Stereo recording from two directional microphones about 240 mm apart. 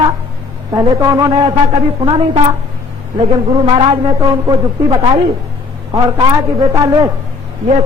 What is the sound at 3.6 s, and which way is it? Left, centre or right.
A woman's voice, centre.